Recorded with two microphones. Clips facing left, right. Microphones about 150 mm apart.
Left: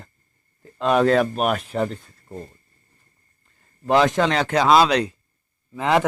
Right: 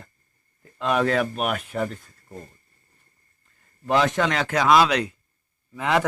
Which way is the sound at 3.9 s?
40° left (ahead or behind).